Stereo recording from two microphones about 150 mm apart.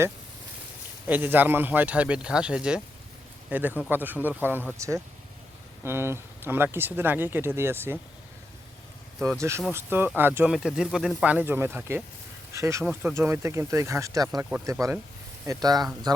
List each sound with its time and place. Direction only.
1.0 s speech: 10° right (ahead or behind)
9.1 s speech: centre (ahead or behind)
9.7 s speech: 15° right (ahead or behind)